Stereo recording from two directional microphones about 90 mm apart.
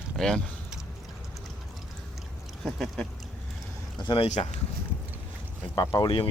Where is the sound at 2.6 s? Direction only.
Centre (ahead or behind).